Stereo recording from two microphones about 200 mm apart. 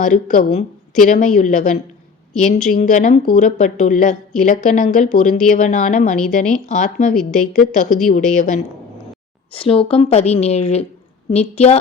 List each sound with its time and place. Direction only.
0.0 s speech: 40° left (ahead or behind)
9.5 s speech: 30° left (ahead or behind)